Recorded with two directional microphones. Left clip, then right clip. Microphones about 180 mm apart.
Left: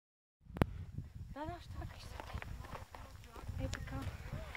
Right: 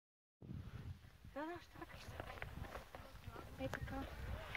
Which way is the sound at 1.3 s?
45° left (ahead or behind).